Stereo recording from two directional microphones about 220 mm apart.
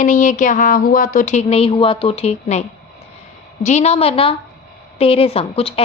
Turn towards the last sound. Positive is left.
turn(degrees=25)  # may be behind; listen again after turning